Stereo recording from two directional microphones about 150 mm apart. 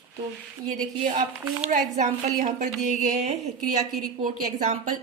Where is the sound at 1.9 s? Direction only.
50° right (ahead or behind).